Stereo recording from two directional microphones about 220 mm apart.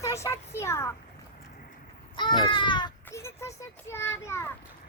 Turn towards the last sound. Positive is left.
turn(degrees=10)  # may be behind; listen again after turning